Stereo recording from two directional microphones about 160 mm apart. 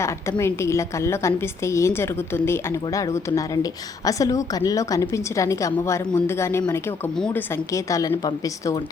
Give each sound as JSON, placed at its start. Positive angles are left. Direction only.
{"t": 0.0, "sound": "a woman's voice", "side_deg": 15}